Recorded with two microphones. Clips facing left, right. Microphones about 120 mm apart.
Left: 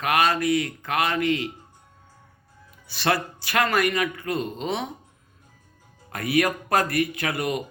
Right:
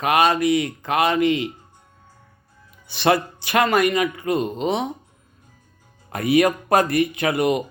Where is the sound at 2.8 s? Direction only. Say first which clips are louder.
Right 5 dB; 20° right (ahead or behind).